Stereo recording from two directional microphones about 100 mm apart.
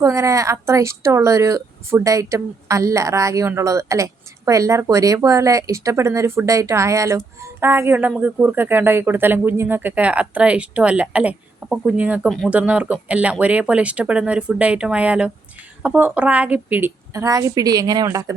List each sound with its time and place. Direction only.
0.0 s a woman's voice: 30° right (ahead or behind)
17.2 s a woman's voice: 35° right (ahead or behind)